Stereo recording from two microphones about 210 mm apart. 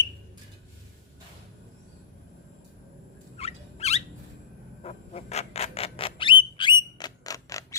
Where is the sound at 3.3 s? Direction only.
30° left (ahead or behind).